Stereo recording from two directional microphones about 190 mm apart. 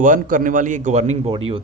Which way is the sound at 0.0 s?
45° right (ahead or behind).